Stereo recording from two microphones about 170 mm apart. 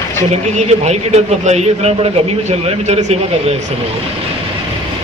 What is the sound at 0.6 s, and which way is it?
A man's voice, 40° right (ahead or behind).